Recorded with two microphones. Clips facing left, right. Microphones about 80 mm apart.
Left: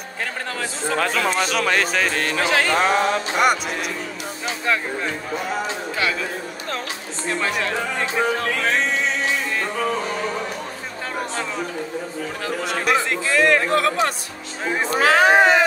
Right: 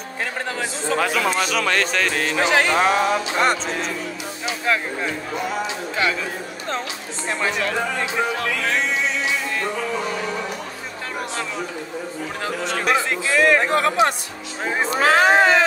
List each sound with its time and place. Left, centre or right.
0.9 s speech: centre
2.4 s music: centre
2.8 s speech: centre
3.3 s speech: centre
8.0 s music: left
12.8 s speech: centre
13.7 s music: right
15.0 s speech: centre
15.3 s a sound: centre